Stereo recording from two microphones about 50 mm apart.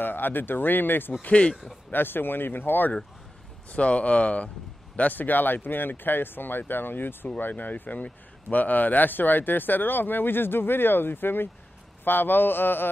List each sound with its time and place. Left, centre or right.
0.0 s speech: left
1.2 s speech: left
1.9 s speech: left
3.7 s speech: left